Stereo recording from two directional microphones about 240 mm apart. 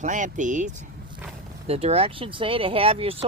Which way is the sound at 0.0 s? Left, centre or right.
Right.